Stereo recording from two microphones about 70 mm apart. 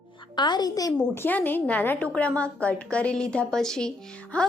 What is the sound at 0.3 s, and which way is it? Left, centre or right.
Speech, left.